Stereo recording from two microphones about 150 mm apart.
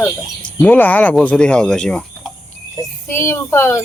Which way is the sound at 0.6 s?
10° left (ahead or behind).